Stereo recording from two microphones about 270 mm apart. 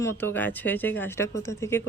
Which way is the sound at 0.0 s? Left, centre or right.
Centre.